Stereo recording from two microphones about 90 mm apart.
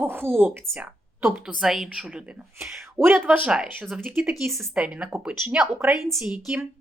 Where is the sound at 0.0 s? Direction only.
25° right (ahead or behind).